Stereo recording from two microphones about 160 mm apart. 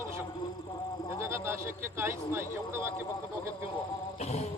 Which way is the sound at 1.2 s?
15° right (ahead or behind).